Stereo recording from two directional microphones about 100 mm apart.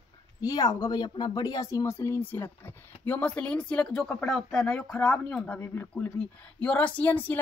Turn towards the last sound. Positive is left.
turn(degrees=20)  # may be behind; listen again after turning